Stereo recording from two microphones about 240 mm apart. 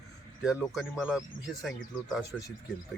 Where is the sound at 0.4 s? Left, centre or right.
Centre.